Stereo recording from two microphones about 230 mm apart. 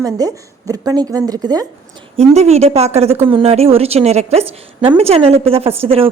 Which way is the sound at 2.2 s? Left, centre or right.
Right.